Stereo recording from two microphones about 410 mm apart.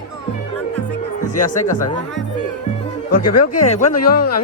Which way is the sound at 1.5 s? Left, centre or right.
Centre.